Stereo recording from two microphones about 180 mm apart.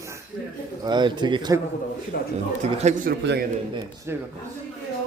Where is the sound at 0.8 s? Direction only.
25° right (ahead or behind).